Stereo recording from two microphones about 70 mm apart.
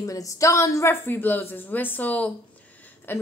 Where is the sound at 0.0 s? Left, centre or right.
Left.